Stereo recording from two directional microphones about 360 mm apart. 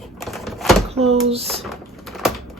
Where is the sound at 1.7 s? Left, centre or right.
Centre.